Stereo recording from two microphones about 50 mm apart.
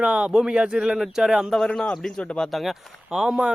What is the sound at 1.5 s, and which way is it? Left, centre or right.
Speech, centre.